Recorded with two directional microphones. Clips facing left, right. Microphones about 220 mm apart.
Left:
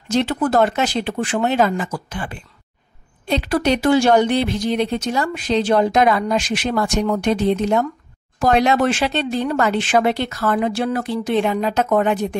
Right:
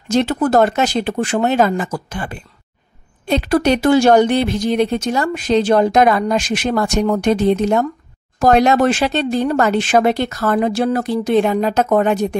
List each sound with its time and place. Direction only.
0.1 s speech: 45° right (ahead or behind)